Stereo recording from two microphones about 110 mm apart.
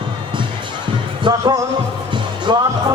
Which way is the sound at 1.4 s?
30° right (ahead or behind).